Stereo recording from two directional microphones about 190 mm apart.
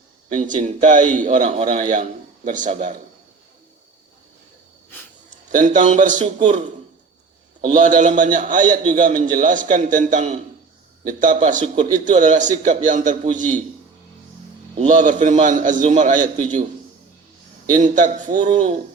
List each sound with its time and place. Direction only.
0.3 s a man's voice: 40° right (ahead or behind)
5.5 s a man's voice: 40° right (ahead or behind)
14.8 s a man's voice: 40° right (ahead or behind)
17.7 s a man's voice: 40° right (ahead or behind)
18.4 s speech: 30° right (ahead or behind)